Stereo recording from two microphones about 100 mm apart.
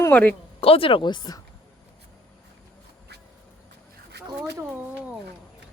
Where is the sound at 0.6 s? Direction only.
70° left (ahead or behind); by 1.4 s 45° left (ahead or behind).